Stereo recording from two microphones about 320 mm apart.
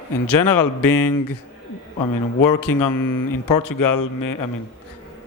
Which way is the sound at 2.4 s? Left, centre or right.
Left.